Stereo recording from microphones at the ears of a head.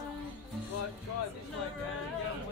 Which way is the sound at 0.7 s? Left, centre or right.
Left.